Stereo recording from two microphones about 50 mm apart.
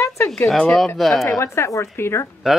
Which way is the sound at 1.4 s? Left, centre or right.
Left.